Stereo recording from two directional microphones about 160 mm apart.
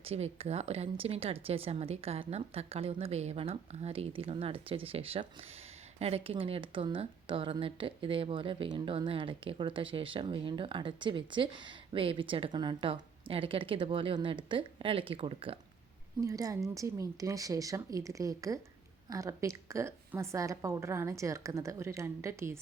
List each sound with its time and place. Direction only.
0.0 s speech: 40° right (ahead or behind)
16.2 s a woman's voice: 20° right (ahead or behind)